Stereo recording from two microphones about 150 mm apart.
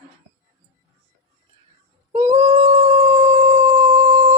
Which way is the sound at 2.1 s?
45° right (ahead or behind).